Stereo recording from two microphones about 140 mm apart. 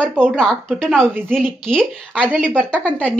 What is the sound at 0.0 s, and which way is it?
A woman's voice, 5° left (ahead or behind).